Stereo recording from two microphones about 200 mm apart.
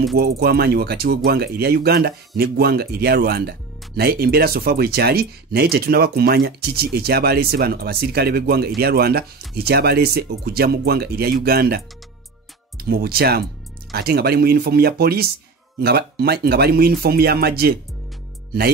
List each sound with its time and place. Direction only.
0.1 s speech: 50° right (ahead or behind)